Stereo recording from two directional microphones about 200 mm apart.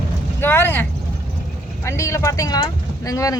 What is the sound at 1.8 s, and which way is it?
Speech, 15° left (ahead or behind).